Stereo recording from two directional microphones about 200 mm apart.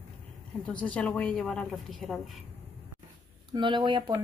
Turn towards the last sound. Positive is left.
turn(degrees=-25)  # may be behind; listen again after turning